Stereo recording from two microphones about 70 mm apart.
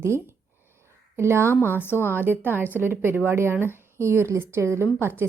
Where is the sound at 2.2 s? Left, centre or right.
Right.